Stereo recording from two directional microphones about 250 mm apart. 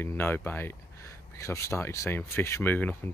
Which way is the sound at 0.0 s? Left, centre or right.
Centre.